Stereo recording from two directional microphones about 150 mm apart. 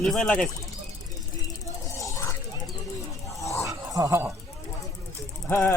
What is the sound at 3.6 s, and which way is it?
Dog, 20° right (ahead or behind).